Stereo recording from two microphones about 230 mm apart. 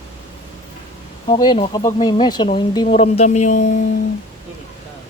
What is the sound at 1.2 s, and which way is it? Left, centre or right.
Speech, left.